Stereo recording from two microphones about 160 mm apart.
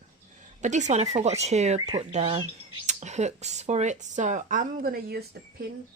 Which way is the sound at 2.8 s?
45° right (ahead or behind).